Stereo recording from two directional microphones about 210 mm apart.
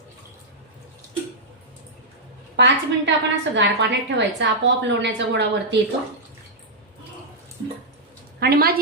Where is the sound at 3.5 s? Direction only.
55° right (ahead or behind).